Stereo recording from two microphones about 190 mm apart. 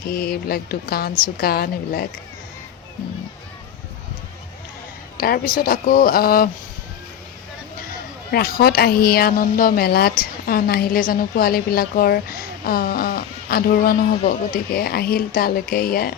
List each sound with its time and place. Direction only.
0.1 s a woman's voice: 50° left (ahead or behind)
5.1 s a woman's voice: 50° left (ahead or behind)
8.3 s a woman's voice: 55° left (ahead or behind)